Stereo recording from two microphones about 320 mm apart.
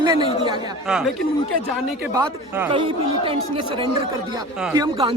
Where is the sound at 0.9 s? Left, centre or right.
Centre.